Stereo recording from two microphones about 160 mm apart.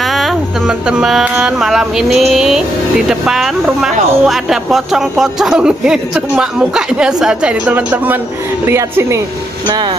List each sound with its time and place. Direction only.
0.0 s speech: centre (ahead or behind); by 9.2 s 15° right (ahead or behind)